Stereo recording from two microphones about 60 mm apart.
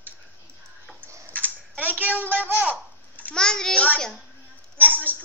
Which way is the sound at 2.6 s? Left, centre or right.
Right.